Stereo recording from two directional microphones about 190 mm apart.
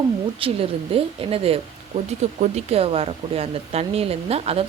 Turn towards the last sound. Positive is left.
turn(degrees=-30)  # may be behind; listen again after turning